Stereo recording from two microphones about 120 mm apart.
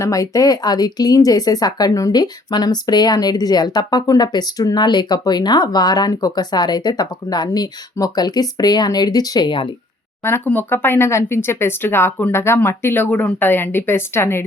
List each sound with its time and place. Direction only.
0.0 s speech: 30° left (ahead or behind)
10.2 s speech: 20° left (ahead or behind)